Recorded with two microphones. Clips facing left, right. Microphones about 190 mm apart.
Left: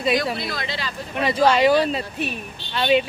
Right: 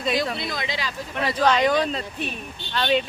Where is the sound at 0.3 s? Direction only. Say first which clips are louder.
Left 1 dB; 20° right (ahead or behind).